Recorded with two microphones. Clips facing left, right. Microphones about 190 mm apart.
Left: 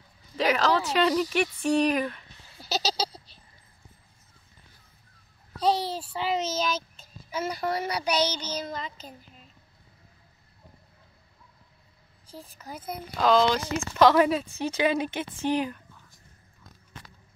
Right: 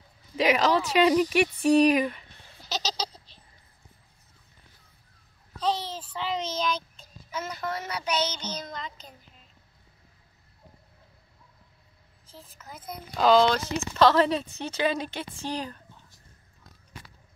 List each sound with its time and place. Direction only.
0.4 s speech: 10° right (ahead or behind)
2.6 s a sound: 5° left (ahead or behind)
5.6 s a child's voice: 10° left (ahead or behind)
8.3 s child singing: 30° left (ahead or behind)
8.5 s child singing: 5° left (ahead or behind)
13.1 s child singing: 5° right (ahead or behind)
13.5 s a child's voice: 10° left (ahead or behind)